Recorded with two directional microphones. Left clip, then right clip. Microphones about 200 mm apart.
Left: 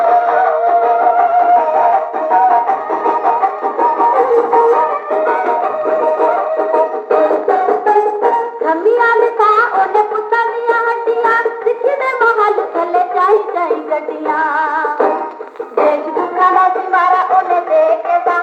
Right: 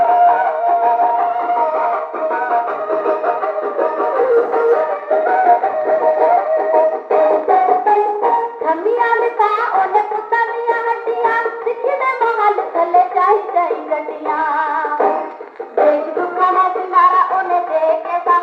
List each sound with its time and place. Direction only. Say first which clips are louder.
0.0 s music: left 1 dB; 40° left (ahead or behind)